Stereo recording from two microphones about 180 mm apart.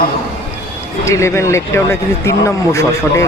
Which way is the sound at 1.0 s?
15° left (ahead or behind).